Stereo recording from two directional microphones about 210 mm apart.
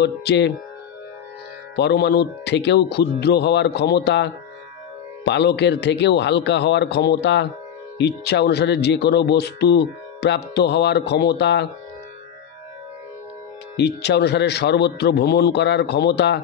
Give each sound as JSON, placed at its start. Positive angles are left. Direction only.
{"t": 0.0, "sound": "speech", "side_deg": 55}
{"t": 1.8, "sound": "a man's voice", "side_deg": 50}
{"t": 13.7, "sound": "speech", "side_deg": 55}